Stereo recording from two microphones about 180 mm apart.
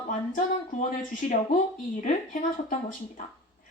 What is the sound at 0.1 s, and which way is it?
Speech, 45° left (ahead or behind).